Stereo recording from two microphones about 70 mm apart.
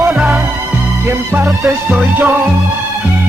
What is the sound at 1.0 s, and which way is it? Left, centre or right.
Music, right.